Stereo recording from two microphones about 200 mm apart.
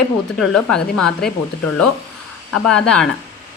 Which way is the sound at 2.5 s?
5° left (ahead or behind).